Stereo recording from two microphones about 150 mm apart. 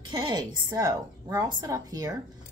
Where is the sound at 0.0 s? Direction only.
30° right (ahead or behind).